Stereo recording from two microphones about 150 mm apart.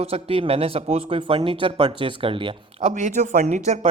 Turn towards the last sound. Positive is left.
turn(degrees=-55)  # may be behind; listen again after turning